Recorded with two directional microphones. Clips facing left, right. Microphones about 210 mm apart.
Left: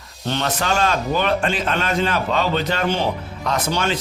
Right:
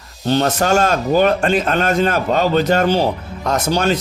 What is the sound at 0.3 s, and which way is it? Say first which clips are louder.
Speech: right 7 dB; 40° right (ahead or behind).